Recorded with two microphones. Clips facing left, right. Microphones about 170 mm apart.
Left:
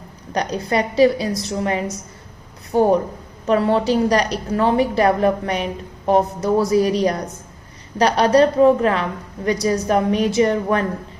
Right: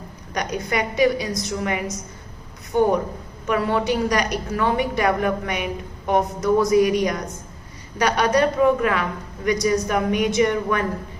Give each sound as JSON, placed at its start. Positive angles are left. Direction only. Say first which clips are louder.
{"t": 0.3, "sound": "a woman's voice", "louder": "left 4 dB", "side_deg": 30}